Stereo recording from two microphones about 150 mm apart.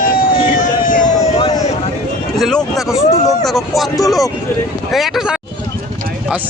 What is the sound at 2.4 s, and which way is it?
Speech, centre (ahead or behind).